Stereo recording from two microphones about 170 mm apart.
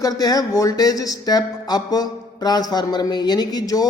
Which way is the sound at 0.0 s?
20° left (ahead or behind).